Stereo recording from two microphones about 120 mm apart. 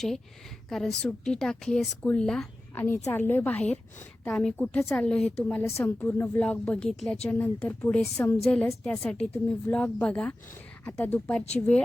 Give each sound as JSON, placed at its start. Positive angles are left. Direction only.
{"t": 0.7, "sound": "a woman's voice", "side_deg": 5}
{"t": 3.1, "sound": "a woman's voice", "side_deg": 15}
{"t": 5.6, "sound": "a woman's voice", "side_deg": 20}